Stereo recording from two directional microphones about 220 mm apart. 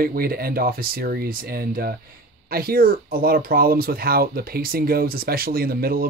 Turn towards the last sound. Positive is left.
turn(degrees=-45)  # may be behind; listen again after turning